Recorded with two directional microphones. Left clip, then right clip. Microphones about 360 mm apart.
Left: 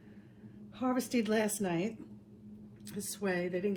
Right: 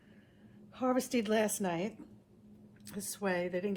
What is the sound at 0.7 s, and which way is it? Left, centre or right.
Speech, centre.